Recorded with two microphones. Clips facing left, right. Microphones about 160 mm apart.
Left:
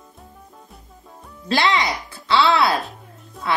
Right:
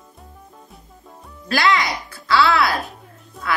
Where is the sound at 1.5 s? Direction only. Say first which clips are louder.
Even; 20° left (ahead or behind).